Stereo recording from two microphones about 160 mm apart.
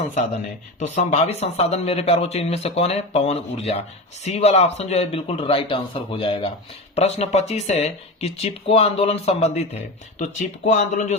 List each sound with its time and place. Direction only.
0.8 s speech: 45° left (ahead or behind)